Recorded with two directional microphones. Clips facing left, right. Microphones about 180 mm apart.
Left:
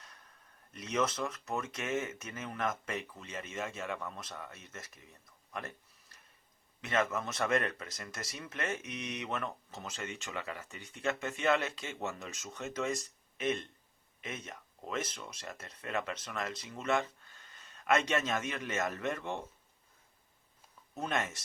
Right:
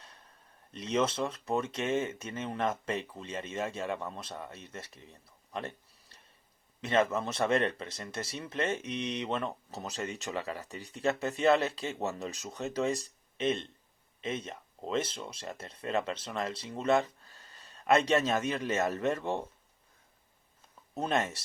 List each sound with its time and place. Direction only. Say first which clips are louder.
0.0 s a sound: right 2 dB; 30° right (ahead or behind)
0.7 s speech: right 3 dB; 30° right (ahead or behind)
20.9 s speech: right 5 dB; 30° right (ahead or behind)